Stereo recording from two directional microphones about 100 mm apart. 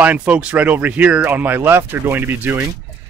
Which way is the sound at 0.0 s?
15° right (ahead or behind).